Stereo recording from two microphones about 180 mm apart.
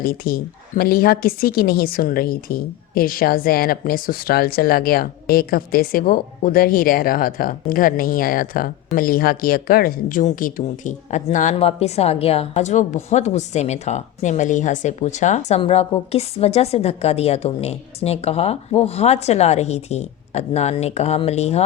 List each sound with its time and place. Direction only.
0.0 s speech: 55° left (ahead or behind); by 21.6 s 35° left (ahead or behind)